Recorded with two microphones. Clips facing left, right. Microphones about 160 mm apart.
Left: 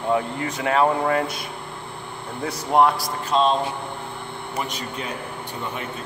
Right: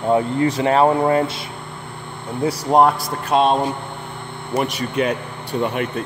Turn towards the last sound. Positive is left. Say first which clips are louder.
# right 9 dB
turn(degrees=-70)  # may be behind; listen again after turning